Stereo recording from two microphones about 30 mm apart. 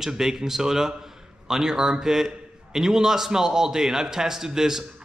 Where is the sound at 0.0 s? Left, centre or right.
Centre.